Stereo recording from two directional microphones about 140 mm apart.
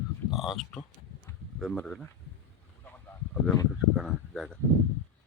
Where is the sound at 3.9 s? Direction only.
5° right (ahead or behind).